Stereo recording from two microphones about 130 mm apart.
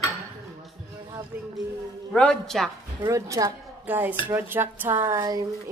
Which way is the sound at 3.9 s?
15° right (ahead or behind).